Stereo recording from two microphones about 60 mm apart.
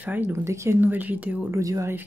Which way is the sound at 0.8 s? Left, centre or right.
Right.